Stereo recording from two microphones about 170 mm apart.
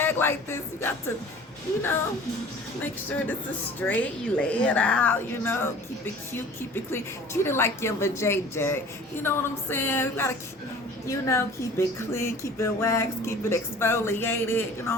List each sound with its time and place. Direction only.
0.0 s a sound: 15° left (ahead or behind)
3.8 s speech: 10° left (ahead or behind)
6.9 s speech: 15° left (ahead or behind)